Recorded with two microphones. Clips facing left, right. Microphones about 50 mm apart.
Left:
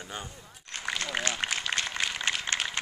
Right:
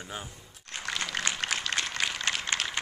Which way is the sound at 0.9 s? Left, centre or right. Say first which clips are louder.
Left 1 dB; centre.